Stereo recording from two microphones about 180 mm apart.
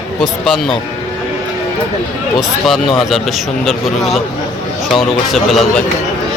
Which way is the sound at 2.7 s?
Centre (ahead or behind).